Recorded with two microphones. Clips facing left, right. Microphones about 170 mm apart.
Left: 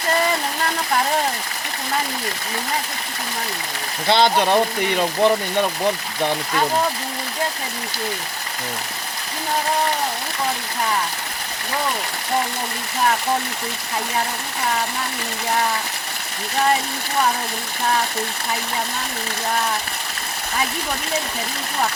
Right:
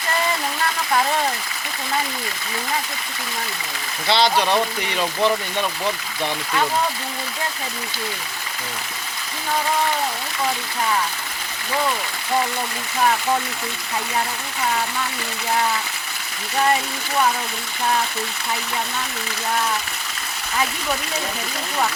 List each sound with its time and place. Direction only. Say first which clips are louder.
4.0 s speech: left 2 dB; 50° left (ahead or behind)